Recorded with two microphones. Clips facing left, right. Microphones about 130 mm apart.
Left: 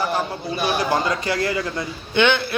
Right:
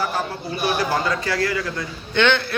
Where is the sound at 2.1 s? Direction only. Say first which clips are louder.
Even; 10° left (ahead or behind).